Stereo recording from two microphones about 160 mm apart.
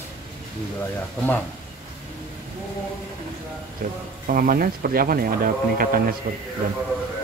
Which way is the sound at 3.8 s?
65° right (ahead or behind).